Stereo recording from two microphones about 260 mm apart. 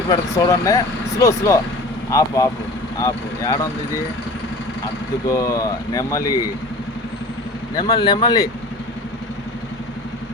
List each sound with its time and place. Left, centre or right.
0.1 s speech: centre
5.3 s speech: centre
7.8 s speech: centre